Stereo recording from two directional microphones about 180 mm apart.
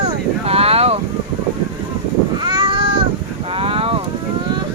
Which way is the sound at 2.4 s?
25° right (ahead or behind).